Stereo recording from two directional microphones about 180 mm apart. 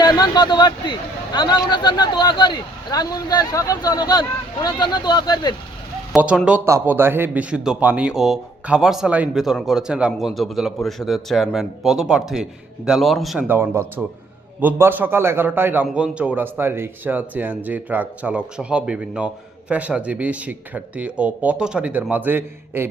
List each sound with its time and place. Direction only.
0.0 s a man's voice: 25° left (ahead or behind)
6.1 s a man's voice: 5° right (ahead or behind)
13.5 s a man's voice: 10° right (ahead or behind)